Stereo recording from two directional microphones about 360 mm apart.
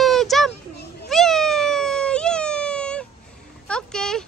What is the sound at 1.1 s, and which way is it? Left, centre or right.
Cat, centre.